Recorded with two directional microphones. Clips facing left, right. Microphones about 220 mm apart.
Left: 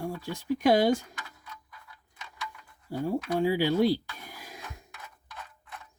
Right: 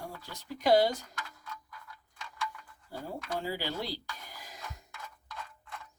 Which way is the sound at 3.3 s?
60° left (ahead or behind).